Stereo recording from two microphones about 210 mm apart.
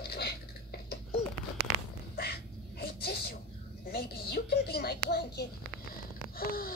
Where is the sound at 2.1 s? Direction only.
50° left (ahead or behind).